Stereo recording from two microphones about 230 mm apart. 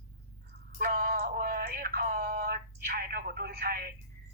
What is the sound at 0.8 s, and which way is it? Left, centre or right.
Synthetic singing, right.